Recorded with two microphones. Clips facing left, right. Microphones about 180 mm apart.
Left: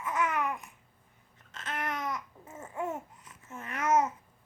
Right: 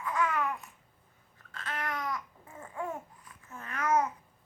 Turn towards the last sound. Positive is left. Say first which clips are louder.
# left 2 dB
turn(degrees=25)  # may be behind; listen again after turning